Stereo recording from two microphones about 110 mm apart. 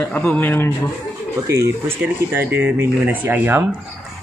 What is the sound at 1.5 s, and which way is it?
Speech, 20° right (ahead or behind).